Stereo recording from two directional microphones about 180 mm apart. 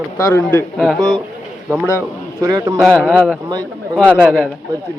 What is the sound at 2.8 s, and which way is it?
Speech, 5° left (ahead or behind).